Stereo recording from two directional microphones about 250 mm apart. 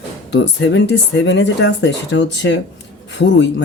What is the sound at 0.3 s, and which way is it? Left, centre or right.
Speech, left.